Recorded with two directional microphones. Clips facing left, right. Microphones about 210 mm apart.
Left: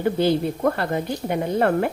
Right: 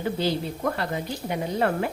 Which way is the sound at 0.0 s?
50° left (ahead or behind).